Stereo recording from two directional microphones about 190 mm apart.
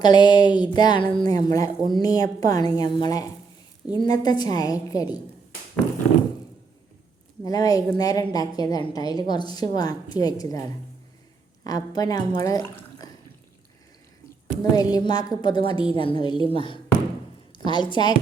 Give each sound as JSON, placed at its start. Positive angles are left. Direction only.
{"t": 0.0, "sound": "a woman's voice", "side_deg": 20}
{"t": 7.4, "sound": "a woman's voice", "side_deg": 20}
{"t": 11.6, "sound": "a woman's voice", "side_deg": 20}
{"t": 14.6, "sound": "a woman's voice", "side_deg": 20}